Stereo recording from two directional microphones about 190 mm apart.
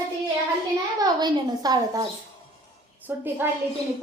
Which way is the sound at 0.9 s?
20° right (ahead or behind).